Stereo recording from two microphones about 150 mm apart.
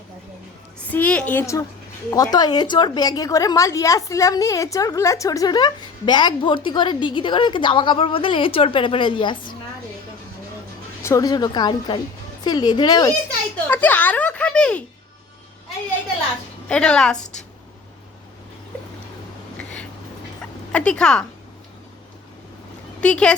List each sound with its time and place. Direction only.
0.9 s a child's voice: 10° left (ahead or behind); by 9.4 s 35° left (ahead or behind)
11.0 s a woman's voice: 25° left (ahead or behind)
13.7 s a child's voice: 10° left (ahead or behind)
16.6 s a woman's voice: 5° left (ahead or behind)
20.4 s a sound: 10° left (ahead or behind)
23.0 s speech: 5° left (ahead or behind)